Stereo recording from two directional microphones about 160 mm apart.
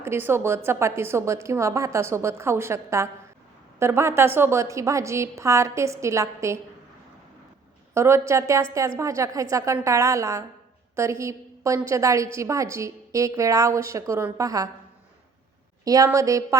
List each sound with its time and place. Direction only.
0.0 s a woman's voice: 15° right (ahead or behind)
7.9 s a woman's voice: 15° right (ahead or behind)
15.8 s a woman's voice: 20° right (ahead or behind)